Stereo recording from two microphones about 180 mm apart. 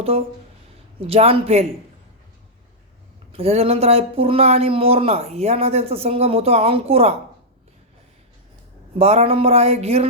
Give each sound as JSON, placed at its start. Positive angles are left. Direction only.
{"t": 0.1, "sound": "speech", "side_deg": -35}
{"t": 3.3, "sound": "speech", "side_deg": -35}
{"t": 9.0, "sound": "speech", "side_deg": -35}